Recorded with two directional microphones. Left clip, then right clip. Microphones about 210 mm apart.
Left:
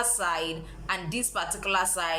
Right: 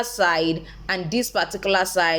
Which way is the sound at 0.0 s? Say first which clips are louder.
Right 8 dB; 30° right (ahead or behind).